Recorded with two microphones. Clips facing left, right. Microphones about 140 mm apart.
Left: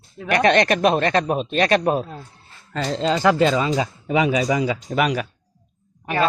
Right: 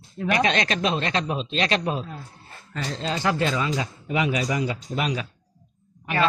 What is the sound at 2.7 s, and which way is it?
Speech, 90° left.